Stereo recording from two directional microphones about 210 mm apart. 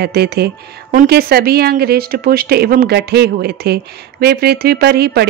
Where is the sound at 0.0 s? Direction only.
50° right (ahead or behind).